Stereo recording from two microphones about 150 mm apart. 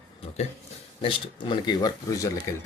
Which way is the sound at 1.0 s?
30° left (ahead or behind).